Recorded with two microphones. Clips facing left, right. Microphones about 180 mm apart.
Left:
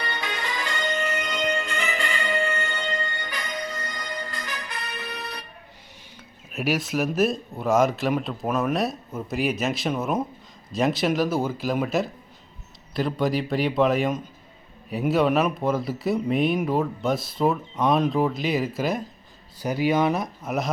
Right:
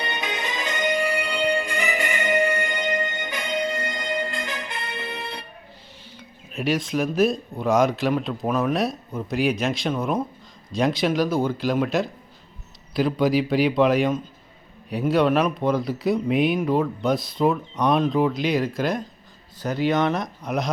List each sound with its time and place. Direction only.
0.0 s music: 20° right (ahead or behind)
6.5 s a man's voice: 5° left (ahead or behind)